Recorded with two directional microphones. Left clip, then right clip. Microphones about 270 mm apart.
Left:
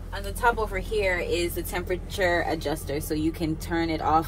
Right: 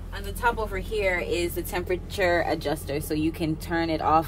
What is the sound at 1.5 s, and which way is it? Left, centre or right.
Speech, right.